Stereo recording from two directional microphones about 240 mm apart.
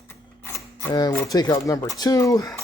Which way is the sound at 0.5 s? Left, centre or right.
Centre.